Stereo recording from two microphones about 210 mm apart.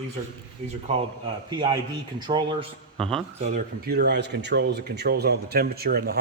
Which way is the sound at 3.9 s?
50° right (ahead or behind).